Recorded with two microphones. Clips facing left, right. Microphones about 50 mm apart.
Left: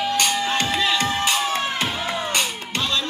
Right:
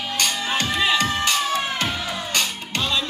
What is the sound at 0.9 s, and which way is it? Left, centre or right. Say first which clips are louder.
Music: even; centre.